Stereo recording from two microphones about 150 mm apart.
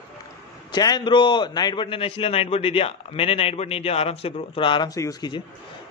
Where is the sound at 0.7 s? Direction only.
25° left (ahead or behind).